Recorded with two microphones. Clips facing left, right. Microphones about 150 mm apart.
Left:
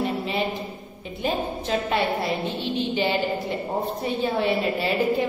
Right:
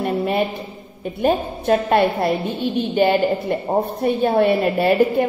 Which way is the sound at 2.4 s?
10° right (ahead or behind).